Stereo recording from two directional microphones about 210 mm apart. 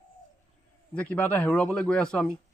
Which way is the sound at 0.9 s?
5° left (ahead or behind).